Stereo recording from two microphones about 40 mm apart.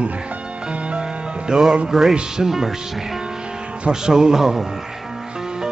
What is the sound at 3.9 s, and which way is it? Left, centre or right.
Speech, centre.